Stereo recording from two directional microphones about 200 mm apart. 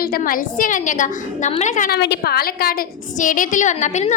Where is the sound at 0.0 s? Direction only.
45° left (ahead or behind).